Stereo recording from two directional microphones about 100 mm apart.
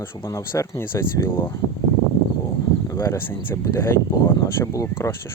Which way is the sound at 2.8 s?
30° left (ahead or behind).